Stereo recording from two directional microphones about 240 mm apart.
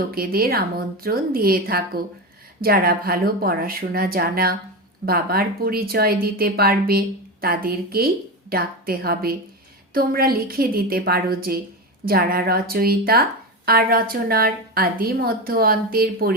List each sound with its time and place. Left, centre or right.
0.1 s a woman's voice: right